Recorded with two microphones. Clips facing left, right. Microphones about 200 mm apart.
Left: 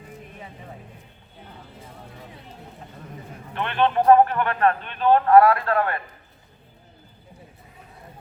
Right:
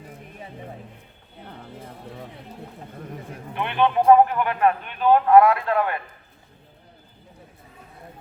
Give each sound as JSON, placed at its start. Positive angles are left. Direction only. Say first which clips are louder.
{"t": 3.5, "sound": "a man's voice", "louder": "even", "side_deg": -15}